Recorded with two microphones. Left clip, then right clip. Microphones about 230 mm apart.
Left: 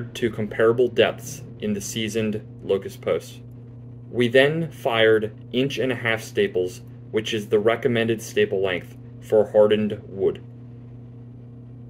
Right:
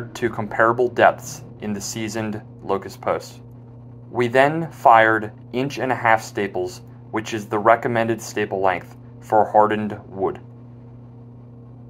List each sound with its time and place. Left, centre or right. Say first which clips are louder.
0.2 s speech: right 2 dB; right